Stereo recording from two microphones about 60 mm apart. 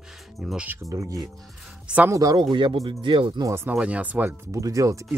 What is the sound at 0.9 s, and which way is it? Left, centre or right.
Speech, right.